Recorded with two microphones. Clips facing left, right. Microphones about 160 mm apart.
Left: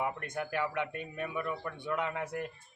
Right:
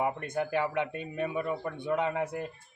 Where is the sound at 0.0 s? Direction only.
25° right (ahead or behind).